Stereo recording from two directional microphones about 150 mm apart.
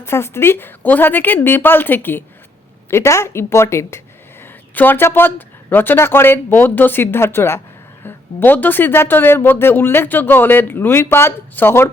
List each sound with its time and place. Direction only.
0.0 s speech: 15° left (ahead or behind)